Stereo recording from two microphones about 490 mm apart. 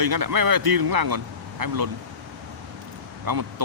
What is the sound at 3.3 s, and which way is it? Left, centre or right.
Speech, right.